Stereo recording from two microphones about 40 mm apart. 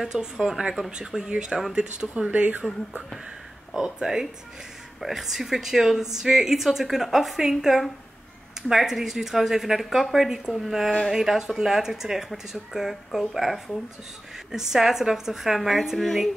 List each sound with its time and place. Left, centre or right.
0.1 s a woman's voice: centre
2.2 s speech: right
3.7 s a woman's voice: centre